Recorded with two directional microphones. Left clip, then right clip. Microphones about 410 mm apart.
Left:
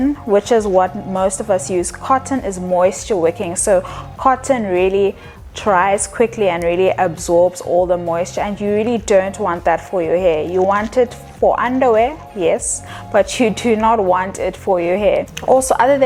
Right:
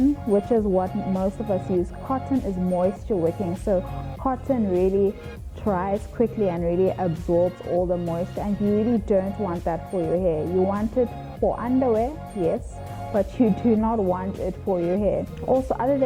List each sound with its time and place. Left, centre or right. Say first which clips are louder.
0.3 s a woman's voice: left 11 dB; centre
4.9 s speech: left 6 dB; left
5.6 s a woman's voice: left 11 dB; centre
13.1 s a woman's voice: left 9 dB; centre